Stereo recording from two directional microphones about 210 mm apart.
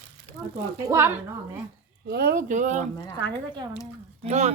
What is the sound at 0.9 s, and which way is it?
Speech, 10° right (ahead or behind).